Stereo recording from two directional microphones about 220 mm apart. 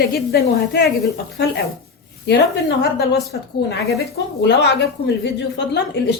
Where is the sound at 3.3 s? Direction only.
50° left (ahead or behind).